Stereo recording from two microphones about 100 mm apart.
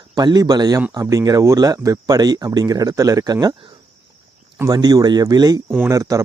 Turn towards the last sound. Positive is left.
turn(degrees=-35)  # may be behind; listen again after turning